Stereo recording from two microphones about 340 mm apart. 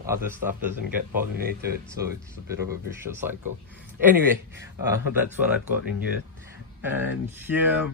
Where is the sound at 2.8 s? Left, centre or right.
Centre.